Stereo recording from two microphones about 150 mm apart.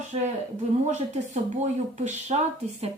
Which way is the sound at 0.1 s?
40° right (ahead or behind).